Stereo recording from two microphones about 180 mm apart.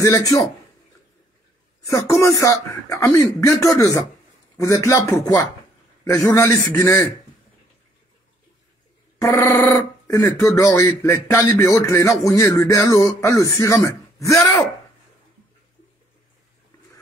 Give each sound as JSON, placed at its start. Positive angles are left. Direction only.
{"t": 0.0, "sound": "speech", "side_deg": 15}
{"t": 1.9, "sound": "speech", "side_deg": 15}
{"t": 9.2, "sound": "speech", "side_deg": 15}